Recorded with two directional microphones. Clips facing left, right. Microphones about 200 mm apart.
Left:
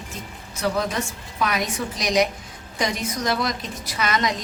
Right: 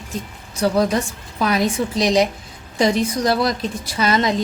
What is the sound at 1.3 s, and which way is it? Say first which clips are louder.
A woman's voice: right 6 dB; 30° right (ahead or behind).